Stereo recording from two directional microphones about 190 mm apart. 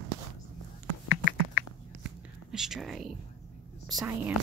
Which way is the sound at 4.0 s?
15° right (ahead or behind).